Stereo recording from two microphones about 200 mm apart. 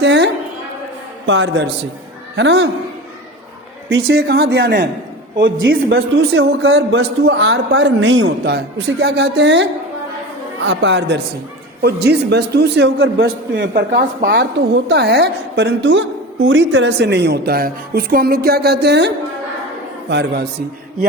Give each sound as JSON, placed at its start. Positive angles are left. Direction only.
{"t": 0.0, "sound": "a sound", "side_deg": -60}
{"t": 1.3, "sound": "a woman's voice", "side_deg": -65}
{"t": 4.1, "sound": "a woman's voice", "side_deg": -55}
{"t": 5.4, "sound": "a man's voice", "side_deg": -70}
{"t": 7.0, "sound": "a woman's voice", "side_deg": -60}
{"t": 10.7, "sound": "a woman's voice", "side_deg": -60}